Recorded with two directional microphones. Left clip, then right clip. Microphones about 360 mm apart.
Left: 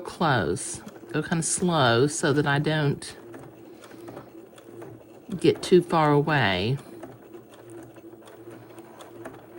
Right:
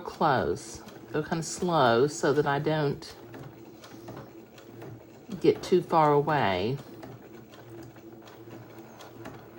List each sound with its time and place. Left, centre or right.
0.0 s speech: left
5.4 s speech: left